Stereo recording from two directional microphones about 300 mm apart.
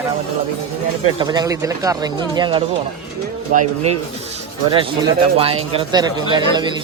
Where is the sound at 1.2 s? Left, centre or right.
Centre.